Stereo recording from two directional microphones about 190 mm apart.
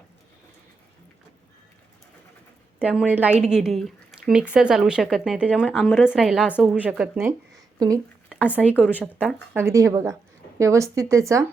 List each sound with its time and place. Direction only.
2.7 s a woman's voice: 5° right (ahead or behind)
8.5 s a woman's voice: 5° right (ahead or behind)